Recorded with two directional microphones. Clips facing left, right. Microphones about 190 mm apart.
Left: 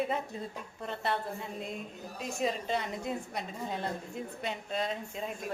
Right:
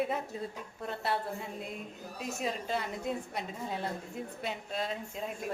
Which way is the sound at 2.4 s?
Centre (ahead or behind).